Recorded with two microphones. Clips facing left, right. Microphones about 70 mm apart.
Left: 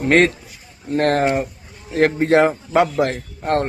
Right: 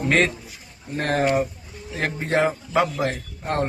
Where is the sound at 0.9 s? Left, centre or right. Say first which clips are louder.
Left 4 dB; left.